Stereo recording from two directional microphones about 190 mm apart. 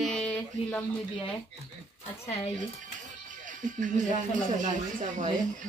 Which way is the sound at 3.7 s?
40° right (ahead or behind).